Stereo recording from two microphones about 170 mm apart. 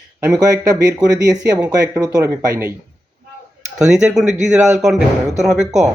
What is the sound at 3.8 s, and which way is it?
Speech, centre (ahead or behind).